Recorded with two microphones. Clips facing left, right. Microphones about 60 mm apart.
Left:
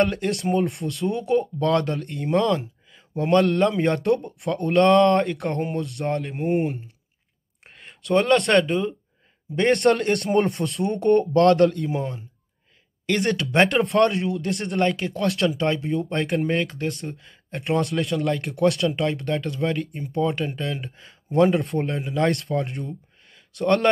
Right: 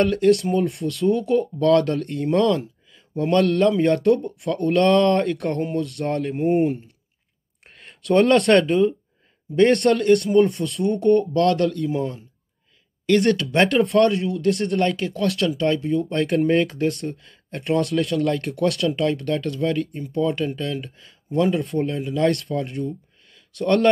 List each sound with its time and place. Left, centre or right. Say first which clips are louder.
0.0 s speech: right 5 dB; centre
9.9 s speech: right 6 dB; left
10.2 s speech: right 4 dB; left
11.0 s speech: left 1 dB; left
11.9 s speech: right 3 dB; centre
14.3 s speech: right 5 dB; centre
15.1 s speech: right 1 dB; centre